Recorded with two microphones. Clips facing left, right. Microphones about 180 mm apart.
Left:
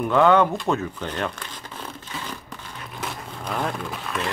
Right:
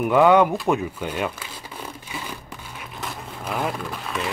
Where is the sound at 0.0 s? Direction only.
10° right (ahead or behind).